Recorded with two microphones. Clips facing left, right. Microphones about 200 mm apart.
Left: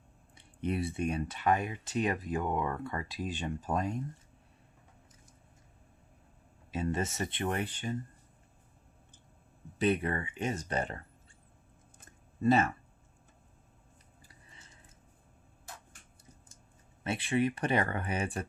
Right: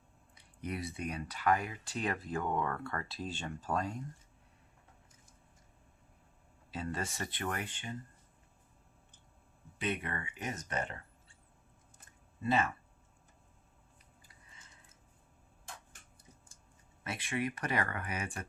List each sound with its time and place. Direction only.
0.3 s speech: 25° left (ahead or behind)
6.7 s speech: 20° left (ahead or behind)
7.7 s speech: 40° left (ahead or behind)
9.7 s speech: 35° left (ahead or behind)
12.4 s speech: 45° left (ahead or behind)
17.0 s speech: 30° left (ahead or behind)